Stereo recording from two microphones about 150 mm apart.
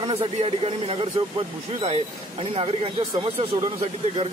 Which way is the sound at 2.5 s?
40° right (ahead or behind).